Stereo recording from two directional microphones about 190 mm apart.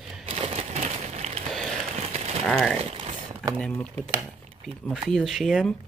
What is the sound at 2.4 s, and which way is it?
Speech, centre (ahead or behind).